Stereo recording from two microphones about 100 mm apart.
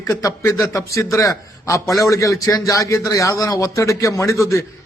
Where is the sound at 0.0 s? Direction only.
30° left (ahead or behind).